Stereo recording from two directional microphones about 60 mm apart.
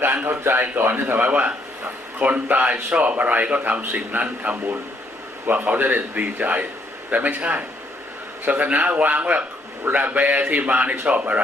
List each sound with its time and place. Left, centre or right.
0.3 s a man's voice: right
1.2 s speech: right